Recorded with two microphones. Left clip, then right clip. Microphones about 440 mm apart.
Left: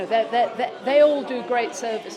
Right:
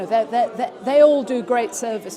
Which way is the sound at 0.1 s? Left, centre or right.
Right.